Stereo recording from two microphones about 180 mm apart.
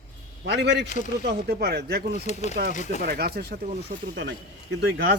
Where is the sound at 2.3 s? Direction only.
40° left (ahead or behind).